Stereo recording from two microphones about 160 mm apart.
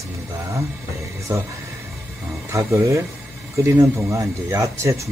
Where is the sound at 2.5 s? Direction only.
20° right (ahead or behind).